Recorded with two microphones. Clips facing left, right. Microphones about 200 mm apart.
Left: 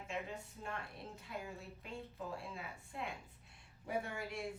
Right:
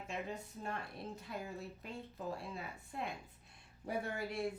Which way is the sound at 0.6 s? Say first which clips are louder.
Right 3 dB; 40° right (ahead or behind).